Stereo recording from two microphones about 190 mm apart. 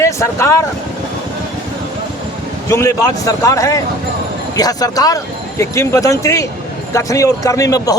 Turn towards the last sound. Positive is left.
turn(degrees=20)  # may be behind; listen again after turning